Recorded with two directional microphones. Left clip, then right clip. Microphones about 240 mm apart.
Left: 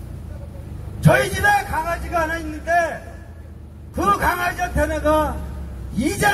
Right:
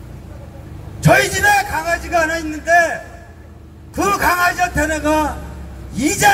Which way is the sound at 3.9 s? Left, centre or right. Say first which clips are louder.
Right 3 dB; right.